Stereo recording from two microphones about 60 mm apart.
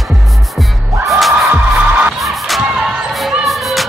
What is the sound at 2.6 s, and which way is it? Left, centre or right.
Music, centre.